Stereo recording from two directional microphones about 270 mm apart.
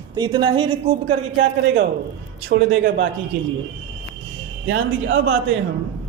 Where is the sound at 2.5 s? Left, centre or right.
Right.